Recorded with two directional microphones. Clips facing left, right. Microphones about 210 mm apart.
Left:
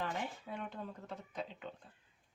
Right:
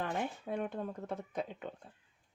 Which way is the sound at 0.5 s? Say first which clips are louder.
Right 7 dB; 50° right (ahead or behind).